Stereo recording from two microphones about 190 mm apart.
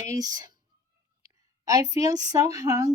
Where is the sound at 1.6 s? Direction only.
20° right (ahead or behind).